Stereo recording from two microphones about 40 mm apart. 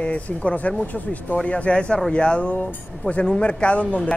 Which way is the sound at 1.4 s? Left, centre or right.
Left.